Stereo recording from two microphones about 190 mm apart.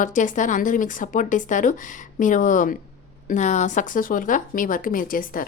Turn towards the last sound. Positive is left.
turn(degrees=45)  # may be behind; listen again after turning